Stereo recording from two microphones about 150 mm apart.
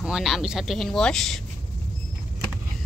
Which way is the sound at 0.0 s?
Centre (ahead or behind).